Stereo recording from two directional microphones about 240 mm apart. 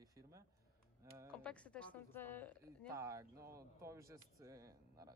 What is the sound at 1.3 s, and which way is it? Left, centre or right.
Speech, centre.